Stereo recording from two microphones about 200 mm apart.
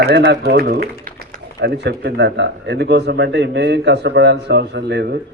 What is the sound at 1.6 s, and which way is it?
Speech, 60° right (ahead or behind).